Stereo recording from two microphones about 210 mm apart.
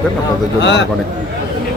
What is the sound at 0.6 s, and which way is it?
Speech, 55° left (ahead or behind).